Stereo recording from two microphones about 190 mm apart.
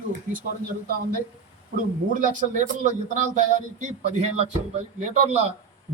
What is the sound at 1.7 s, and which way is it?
A man's voice, 45° right (ahead or behind).